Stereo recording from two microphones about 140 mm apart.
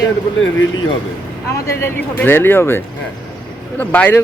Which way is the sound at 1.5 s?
20° left (ahead or behind).